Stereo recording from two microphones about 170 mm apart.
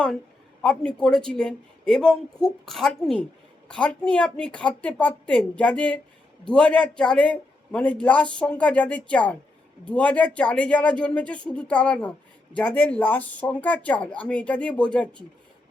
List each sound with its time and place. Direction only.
0.6 s a woman's voice: 5° left (ahead or behind)